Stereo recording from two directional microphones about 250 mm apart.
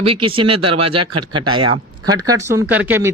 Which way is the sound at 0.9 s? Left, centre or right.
Right.